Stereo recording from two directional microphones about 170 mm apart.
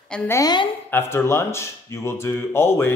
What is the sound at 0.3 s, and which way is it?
A woman's voice, 20° left (ahead or behind).